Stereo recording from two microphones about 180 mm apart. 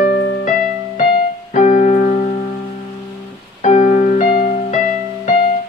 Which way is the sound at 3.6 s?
45° left (ahead or behind).